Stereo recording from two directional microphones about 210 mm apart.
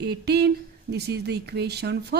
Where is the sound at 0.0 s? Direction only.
50° right (ahead or behind).